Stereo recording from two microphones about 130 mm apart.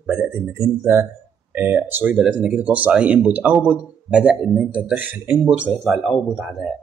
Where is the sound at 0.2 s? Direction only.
20° right (ahead or behind).